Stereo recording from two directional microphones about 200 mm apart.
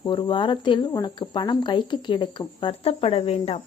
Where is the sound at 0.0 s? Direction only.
25° left (ahead or behind).